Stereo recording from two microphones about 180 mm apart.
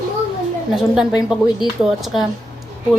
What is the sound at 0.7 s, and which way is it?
A woman's voice, centre (ahead or behind).